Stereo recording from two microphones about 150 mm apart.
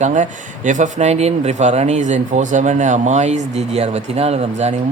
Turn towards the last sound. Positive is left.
turn(degrees=-45)  # may be behind; listen again after turning